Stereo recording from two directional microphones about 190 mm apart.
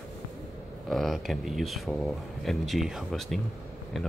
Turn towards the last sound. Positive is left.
turn(degrees=0)  # may be behind; listen again after turning